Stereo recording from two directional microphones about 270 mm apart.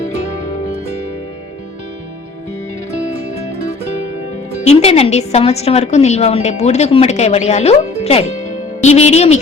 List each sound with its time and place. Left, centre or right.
4.6 s a woman's voice: left